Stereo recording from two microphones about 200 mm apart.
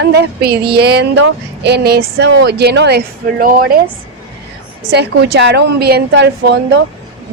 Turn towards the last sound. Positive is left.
turn(degrees=-55)  # may be behind; listen again after turning